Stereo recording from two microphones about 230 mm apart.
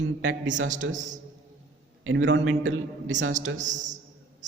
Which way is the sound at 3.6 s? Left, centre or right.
Right.